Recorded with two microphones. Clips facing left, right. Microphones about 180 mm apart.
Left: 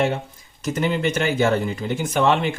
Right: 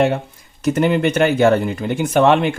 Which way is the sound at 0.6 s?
60° right (ahead or behind).